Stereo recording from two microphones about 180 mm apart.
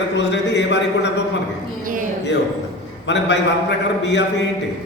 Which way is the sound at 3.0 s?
80° left.